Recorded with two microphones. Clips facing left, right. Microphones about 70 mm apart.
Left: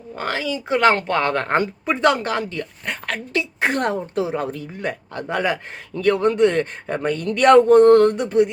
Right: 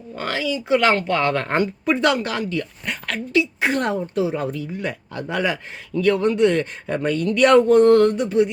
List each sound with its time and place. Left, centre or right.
0.2 s a woman's voice: left
4.5 s a woman's voice: left
8.1 s mantra: left